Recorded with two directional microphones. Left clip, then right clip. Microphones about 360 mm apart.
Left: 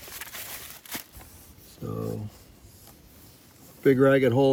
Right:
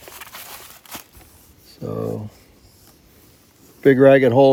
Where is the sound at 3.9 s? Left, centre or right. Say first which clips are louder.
Right 8 dB; centre.